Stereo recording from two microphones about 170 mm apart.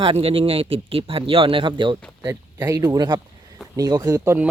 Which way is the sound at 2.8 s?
25° right (ahead or behind).